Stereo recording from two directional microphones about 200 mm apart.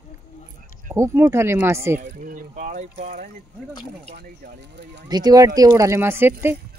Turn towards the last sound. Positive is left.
turn(degrees=-10)  # may be behind; listen again after turning